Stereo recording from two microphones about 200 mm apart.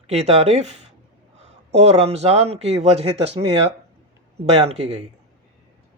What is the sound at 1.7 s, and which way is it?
Speech, 30° right (ahead or behind).